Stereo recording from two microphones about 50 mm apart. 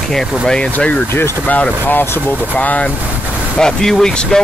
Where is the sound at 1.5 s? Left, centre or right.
Left.